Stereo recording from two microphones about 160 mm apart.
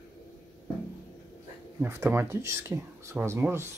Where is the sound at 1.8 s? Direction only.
15° right (ahead or behind).